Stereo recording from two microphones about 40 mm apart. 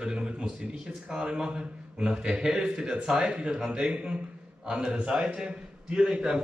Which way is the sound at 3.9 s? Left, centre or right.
Right.